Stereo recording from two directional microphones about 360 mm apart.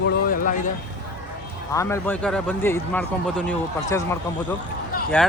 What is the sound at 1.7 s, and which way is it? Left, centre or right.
Speech, centre.